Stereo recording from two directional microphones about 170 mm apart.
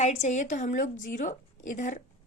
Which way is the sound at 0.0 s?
40° left (ahead or behind).